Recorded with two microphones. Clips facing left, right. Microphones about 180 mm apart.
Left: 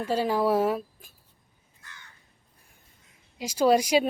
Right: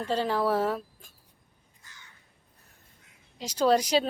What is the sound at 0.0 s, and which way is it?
A woman's voice, 10° left (ahead or behind).